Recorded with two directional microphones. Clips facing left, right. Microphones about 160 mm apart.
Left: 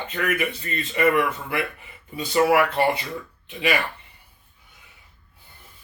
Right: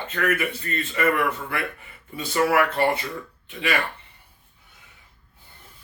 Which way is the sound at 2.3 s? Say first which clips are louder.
Left 2 dB; 20° left (ahead or behind).